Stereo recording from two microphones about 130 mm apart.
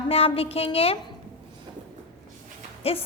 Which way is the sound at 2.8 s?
50° left (ahead or behind).